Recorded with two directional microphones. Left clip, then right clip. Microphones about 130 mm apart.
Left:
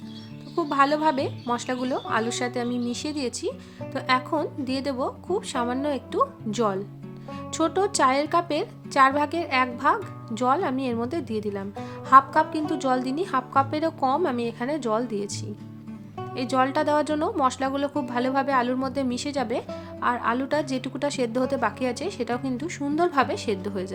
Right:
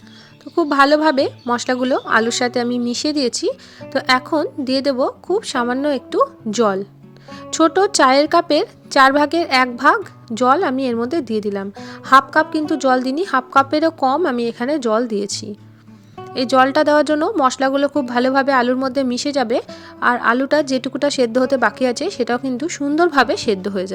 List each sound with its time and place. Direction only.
0.5 s speech: 40° right (ahead or behind)